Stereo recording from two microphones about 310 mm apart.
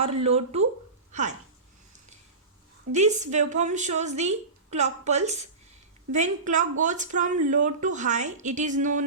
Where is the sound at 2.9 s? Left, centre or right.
Right.